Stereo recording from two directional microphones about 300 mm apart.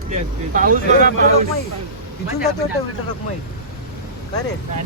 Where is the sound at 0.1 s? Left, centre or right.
Right.